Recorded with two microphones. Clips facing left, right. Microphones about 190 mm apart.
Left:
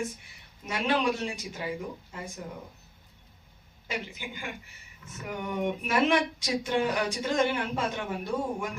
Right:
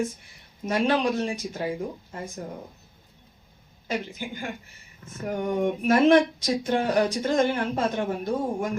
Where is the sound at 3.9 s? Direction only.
45° right (ahead or behind).